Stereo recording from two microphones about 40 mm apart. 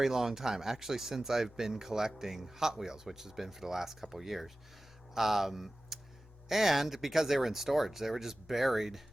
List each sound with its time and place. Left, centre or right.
0.0 s speech: centre